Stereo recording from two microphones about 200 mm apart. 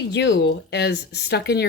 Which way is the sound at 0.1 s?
60° left (ahead or behind).